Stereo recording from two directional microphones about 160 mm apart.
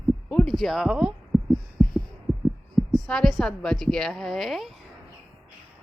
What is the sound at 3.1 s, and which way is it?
A woman's voice, centre (ahead or behind).